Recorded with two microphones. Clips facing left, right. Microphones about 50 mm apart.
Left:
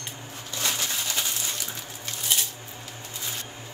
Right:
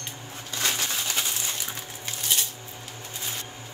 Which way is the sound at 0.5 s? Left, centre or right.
Right.